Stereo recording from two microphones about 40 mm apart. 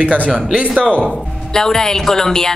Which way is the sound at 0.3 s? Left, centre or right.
Centre.